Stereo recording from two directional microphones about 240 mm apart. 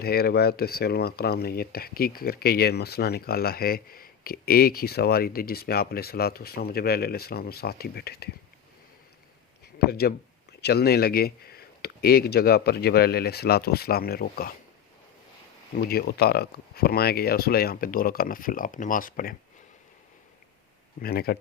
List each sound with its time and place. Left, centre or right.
0.0 s speech: left
9.7 s speech: left
15.7 s speech: left
21.0 s speech: left